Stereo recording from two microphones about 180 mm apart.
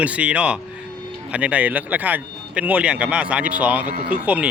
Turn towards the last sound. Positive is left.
turn(degrees=-10)  # may be behind; listen again after turning